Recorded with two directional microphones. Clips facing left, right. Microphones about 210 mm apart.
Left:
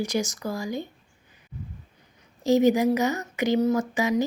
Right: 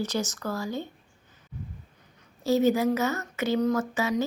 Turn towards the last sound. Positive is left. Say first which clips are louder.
# left 3 dB
turn(degrees=15)  # may be behind; listen again after turning